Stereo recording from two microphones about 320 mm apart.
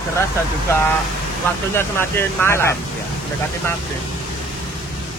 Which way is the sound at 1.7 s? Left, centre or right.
Centre.